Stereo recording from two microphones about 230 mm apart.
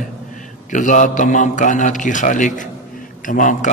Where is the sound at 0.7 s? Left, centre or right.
Left.